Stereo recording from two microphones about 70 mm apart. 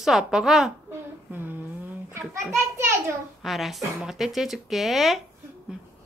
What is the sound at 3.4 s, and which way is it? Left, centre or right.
A woman's voice, centre.